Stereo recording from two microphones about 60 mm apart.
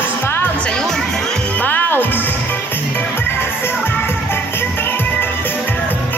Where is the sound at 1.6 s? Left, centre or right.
Left.